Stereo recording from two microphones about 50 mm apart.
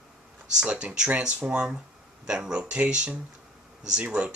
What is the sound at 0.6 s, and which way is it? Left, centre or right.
Speech, centre.